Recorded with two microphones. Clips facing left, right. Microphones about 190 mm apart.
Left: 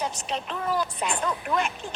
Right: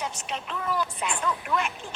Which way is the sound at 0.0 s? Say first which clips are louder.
Left 3 dB; 35° left (ahead or behind).